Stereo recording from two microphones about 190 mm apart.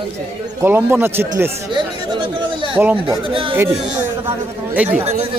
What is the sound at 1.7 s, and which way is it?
Speech, 25° right (ahead or behind).